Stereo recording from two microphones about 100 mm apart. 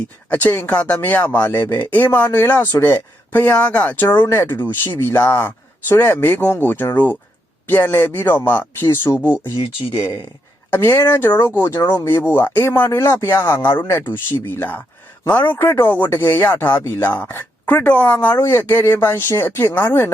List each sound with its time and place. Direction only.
0.3 s speech: 15° left (ahead or behind)
10.7 s speech: 20° left (ahead or behind)